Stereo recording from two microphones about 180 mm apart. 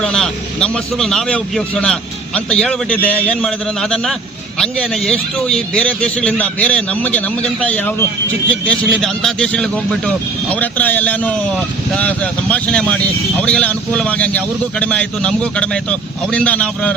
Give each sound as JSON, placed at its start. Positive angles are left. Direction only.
{"t": 0.0, "sound": "a man's voice", "side_deg": 5}